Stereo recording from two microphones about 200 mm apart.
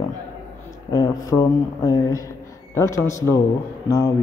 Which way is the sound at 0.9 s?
20° left (ahead or behind).